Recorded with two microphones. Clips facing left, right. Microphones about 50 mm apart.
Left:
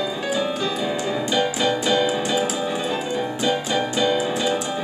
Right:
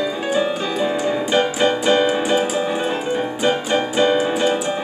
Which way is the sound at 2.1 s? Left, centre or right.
Right.